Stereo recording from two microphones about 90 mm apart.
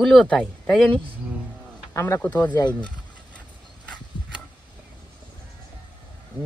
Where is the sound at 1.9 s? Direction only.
30° left (ahead or behind).